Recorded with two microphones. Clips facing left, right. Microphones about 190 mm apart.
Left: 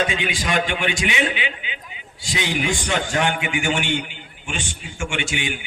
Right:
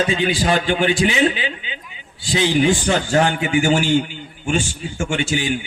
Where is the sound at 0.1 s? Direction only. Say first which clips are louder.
Right 6 dB; 35° right (ahead or behind).